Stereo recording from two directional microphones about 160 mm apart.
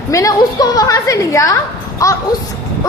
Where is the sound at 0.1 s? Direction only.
20° left (ahead or behind).